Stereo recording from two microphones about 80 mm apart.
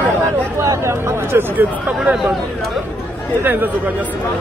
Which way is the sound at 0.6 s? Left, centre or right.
Right.